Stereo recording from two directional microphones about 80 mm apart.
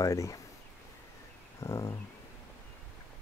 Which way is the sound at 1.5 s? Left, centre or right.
Left.